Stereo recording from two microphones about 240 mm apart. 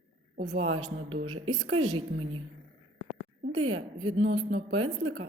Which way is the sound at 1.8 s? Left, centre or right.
Centre.